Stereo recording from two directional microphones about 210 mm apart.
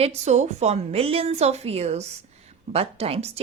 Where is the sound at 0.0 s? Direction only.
30° right (ahead or behind).